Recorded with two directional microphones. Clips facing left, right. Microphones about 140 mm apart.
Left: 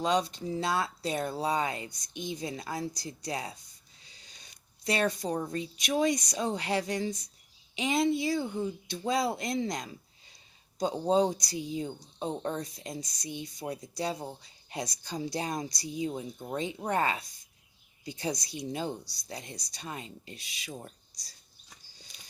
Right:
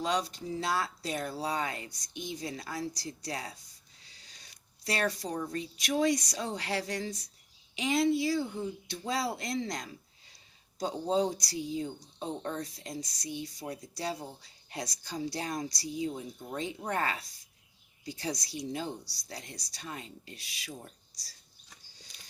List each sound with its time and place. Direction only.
0.0 s speech: 25° left (ahead or behind)
4.0 s a sound: 20° left (ahead or behind)
4.8 s speech: 20° left (ahead or behind)